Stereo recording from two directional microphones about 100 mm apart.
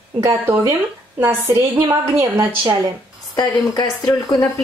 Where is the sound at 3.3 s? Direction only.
40° left (ahead or behind).